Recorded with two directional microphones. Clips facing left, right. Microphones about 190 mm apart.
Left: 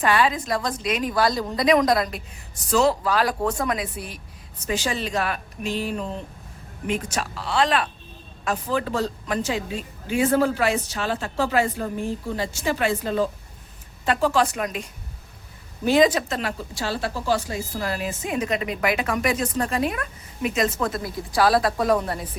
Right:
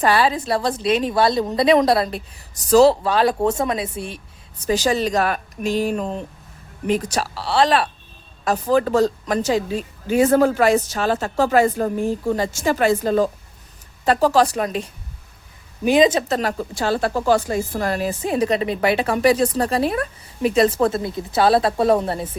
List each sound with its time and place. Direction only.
0.0 s a woman's voice: 35° right (ahead or behind)
4.6 s a woman's voice: 40° right (ahead or behind)
6.8 s a woman's voice: 35° right (ahead or behind)
15.8 s a woman's voice: 20° right (ahead or behind)
16.3 s a woman's voice: 40° right (ahead or behind); by 22.3 s 25° right (ahead or behind)